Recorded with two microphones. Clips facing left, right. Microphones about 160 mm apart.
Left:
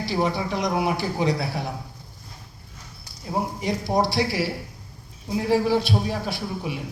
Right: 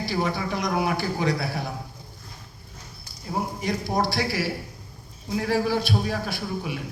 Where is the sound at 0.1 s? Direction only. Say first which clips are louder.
Left 3 dB; 25° left (ahead or behind).